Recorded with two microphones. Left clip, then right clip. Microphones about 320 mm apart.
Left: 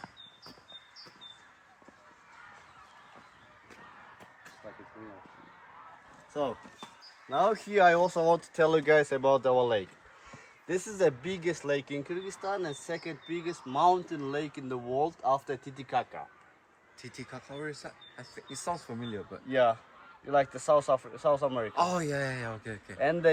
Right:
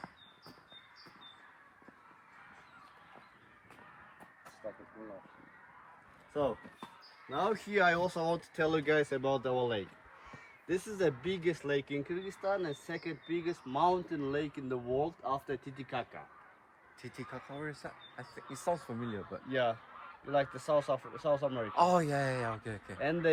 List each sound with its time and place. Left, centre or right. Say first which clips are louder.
6.3 s speech: left 1 dB; centre
10.7 s speech: left 5 dB; centre
19.5 s speech: left 7 dB; centre
21.8 s speech: right 2 dB; centre
23.0 s speech: left 6 dB; centre